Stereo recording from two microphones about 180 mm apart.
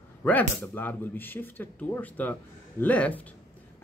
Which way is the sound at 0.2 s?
10° left (ahead or behind).